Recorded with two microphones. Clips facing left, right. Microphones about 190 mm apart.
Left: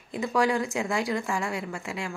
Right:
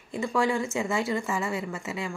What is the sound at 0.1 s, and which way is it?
Speech, centre (ahead or behind).